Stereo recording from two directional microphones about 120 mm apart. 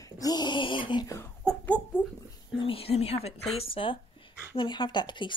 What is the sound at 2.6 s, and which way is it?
Speech, 50° left (ahead or behind).